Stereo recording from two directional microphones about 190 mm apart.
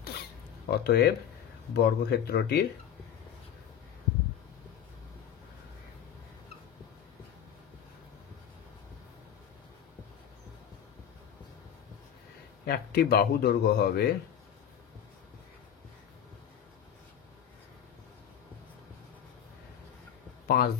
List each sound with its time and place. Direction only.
0.7 s speech: 60° left (ahead or behind)
12.6 s speech: 55° left (ahead or behind)
20.4 s music: 55° left (ahead or behind)